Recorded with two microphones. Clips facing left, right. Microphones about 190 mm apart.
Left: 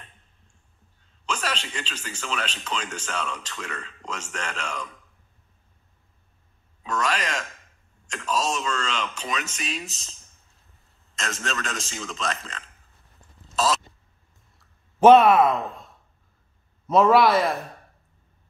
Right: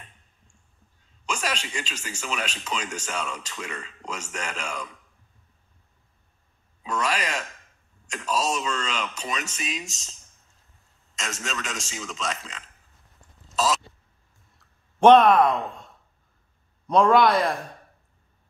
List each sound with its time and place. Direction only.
1.2 s speech: 10° right (ahead or behind)
6.8 s speech: 10° right (ahead or behind)
9.1 s speech: 40° right (ahead or behind)
11.1 s speech: 10° right (ahead or behind)
14.6 s a sound: 5° left (ahead or behind)
16.8 s a man's voice: 5° left (ahead or behind)